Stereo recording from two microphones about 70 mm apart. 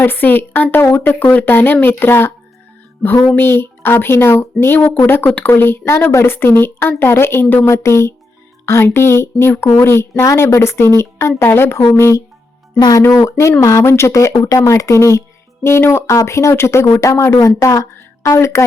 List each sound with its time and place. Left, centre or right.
0.0 s a woman's voice: left
14.7 s a woman's voice: left